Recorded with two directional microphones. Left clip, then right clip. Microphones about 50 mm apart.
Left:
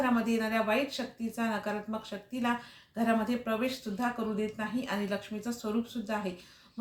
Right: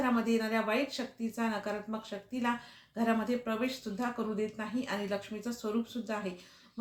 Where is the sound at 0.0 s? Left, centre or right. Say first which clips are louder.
Left 1 dB; right.